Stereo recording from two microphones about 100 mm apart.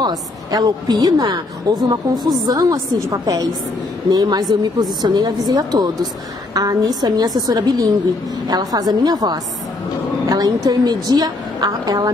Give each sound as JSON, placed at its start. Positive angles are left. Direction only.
{"t": 0.0, "sound": "a woman's voice", "side_deg": -40}
{"t": 2.4, "sound": "a woman's voice", "side_deg": -35}